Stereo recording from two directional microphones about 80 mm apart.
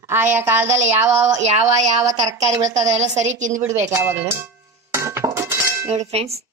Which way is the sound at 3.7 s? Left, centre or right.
Right.